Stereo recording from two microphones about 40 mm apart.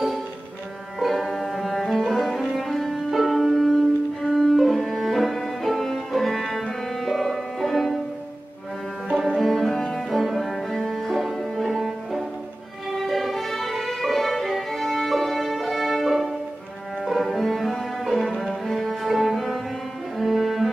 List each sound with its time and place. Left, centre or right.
0.9 s cello: centre
7.0 s music: centre
9.4 s music: centre
17.0 s cello: centre
18.7 s music: centre
20.2 s cello: centre